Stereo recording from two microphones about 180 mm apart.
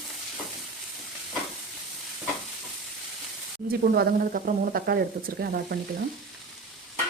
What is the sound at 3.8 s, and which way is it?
Speech, 55° right (ahead or behind).